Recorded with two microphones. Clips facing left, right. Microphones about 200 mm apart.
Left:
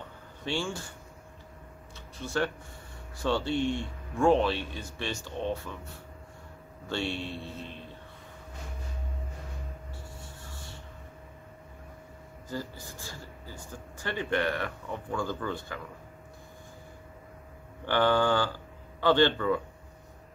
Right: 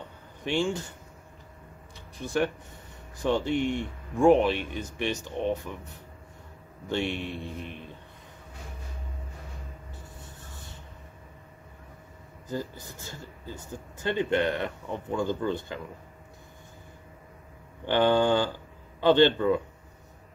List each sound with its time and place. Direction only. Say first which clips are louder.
0.4 s speech: right 5 dB; 20° right (ahead or behind)
2.1 s speech: right 3 dB; 15° right (ahead or behind)
6.9 s speech: right 3 dB; 15° right (ahead or behind)
12.4 s speech: right 3 dB; 20° right (ahead or behind)
17.8 s speech: right 3 dB; 20° right (ahead or behind)